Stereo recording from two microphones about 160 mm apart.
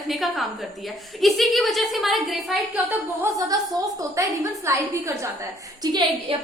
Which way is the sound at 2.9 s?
20° right (ahead or behind).